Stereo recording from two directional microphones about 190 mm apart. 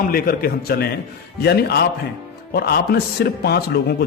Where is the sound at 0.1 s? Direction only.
50° left (ahead or behind).